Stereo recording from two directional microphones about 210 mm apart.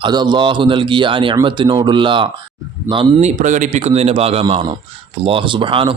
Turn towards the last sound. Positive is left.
turn(degrees=-25)  # may be behind; listen again after turning